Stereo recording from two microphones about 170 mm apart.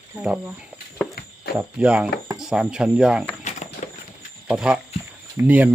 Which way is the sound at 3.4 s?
45° left (ahead or behind).